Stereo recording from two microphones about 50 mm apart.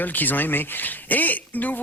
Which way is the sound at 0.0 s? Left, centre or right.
Left.